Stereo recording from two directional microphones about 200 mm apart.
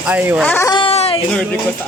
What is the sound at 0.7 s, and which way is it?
Baby cry, 30° left (ahead or behind).